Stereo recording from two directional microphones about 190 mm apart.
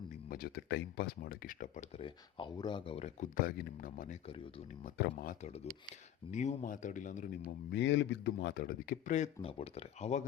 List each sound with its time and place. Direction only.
0.1 s speech: 50° left (ahead or behind)
2.0 s speech: 25° left (ahead or behind)
3.3 s speech: 50° left (ahead or behind)
7.7 s speech: 70° left (ahead or behind); by 10.2 s 35° left (ahead or behind)